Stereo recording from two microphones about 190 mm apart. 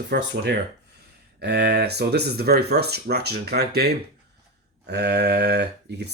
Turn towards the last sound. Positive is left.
turn(degrees=-60)  # may be behind; listen again after turning